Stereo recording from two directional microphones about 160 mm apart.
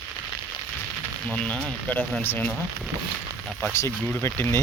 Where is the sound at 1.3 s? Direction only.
10° left (ahead or behind).